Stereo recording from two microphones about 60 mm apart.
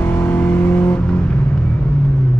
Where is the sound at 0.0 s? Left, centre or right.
Left.